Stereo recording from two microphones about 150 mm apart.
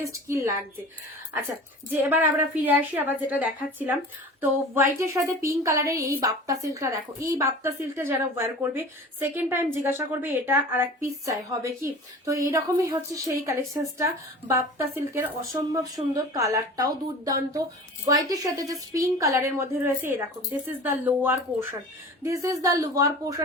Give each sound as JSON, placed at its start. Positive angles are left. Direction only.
{"t": 0.1, "sound": "speech", "side_deg": -20}
{"t": 1.9, "sound": "a woman's voice", "side_deg": -10}